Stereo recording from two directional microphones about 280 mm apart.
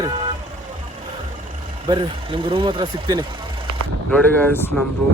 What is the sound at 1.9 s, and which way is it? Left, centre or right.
Speech, centre.